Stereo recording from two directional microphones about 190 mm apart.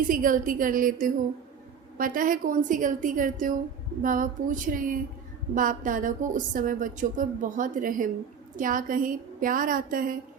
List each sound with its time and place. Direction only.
0.1 s a woman's voice: 45° right (ahead or behind)